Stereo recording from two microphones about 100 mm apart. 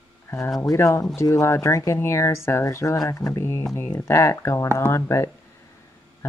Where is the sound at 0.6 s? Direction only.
30° left (ahead or behind).